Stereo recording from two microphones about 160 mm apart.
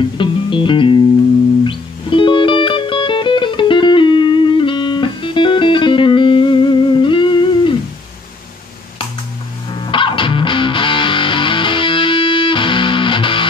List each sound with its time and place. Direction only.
0.2 s music: 30° left (ahead or behind)
9.8 s music: 30° left (ahead or behind)